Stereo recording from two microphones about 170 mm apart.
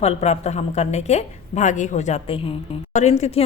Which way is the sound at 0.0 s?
40° left (ahead or behind).